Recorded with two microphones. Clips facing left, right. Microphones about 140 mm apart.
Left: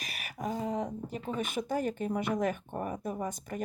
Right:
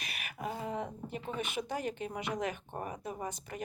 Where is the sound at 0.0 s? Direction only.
40° left (ahead or behind).